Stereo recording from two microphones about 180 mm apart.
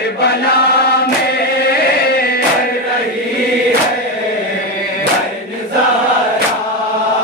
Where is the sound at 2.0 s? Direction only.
55° left (ahead or behind).